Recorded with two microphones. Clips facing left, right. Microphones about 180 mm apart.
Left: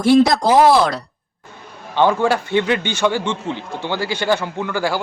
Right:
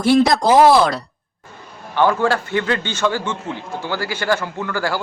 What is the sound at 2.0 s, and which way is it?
Speech, 20° left (ahead or behind).